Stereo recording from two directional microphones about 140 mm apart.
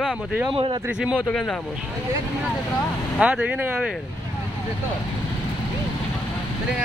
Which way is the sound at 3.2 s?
10° right (ahead or behind).